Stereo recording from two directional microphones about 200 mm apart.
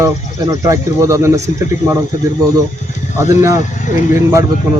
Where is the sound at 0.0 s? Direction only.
15° right (ahead or behind).